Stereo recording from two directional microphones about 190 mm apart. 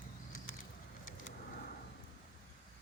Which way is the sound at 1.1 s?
45° left (ahead or behind).